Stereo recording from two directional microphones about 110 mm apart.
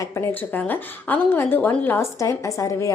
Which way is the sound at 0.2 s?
15° left (ahead or behind).